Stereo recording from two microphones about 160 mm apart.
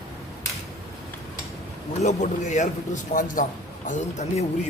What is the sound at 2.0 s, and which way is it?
A man's voice, 50° left (ahead or behind).